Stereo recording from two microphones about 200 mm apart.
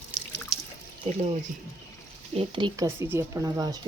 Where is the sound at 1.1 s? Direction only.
35° right (ahead or behind).